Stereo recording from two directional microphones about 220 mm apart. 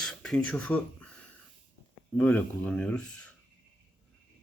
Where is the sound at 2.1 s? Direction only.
5° left (ahead or behind).